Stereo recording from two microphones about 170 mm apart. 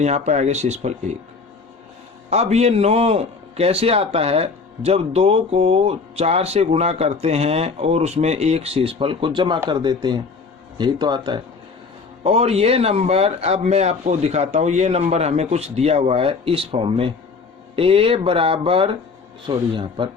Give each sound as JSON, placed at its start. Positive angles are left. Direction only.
{"t": 0.0, "sound": "a man's voice", "side_deg": -40}
{"t": 2.3, "sound": "a man's voice", "side_deg": -40}
{"t": 12.2, "sound": "a man's voice", "side_deg": -35}